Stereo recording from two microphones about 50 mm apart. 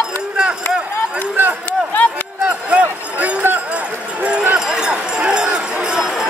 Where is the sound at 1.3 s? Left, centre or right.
Right.